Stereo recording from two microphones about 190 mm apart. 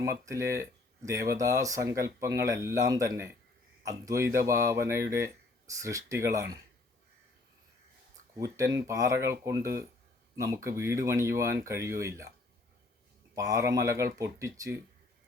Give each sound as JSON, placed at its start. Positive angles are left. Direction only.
{"t": 0.0, "sound": "speech", "side_deg": -15}
{"t": 8.4, "sound": "speech", "side_deg": -15}
{"t": 13.3, "sound": "speech", "side_deg": -15}